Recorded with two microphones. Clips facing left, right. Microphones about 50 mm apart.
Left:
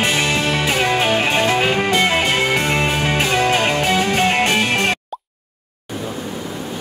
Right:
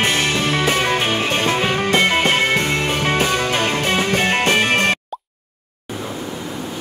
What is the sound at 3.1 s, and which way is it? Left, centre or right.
Music, left.